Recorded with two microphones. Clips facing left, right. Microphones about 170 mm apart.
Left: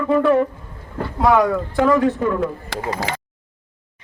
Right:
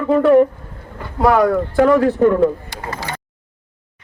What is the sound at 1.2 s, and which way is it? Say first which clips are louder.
Speech: right 2 dB; centre (ahead or behind).